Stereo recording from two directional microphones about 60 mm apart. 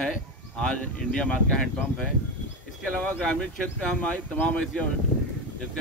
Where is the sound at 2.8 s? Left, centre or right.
Left.